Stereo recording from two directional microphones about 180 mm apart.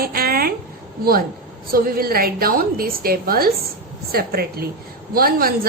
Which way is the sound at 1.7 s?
55° right (ahead or behind).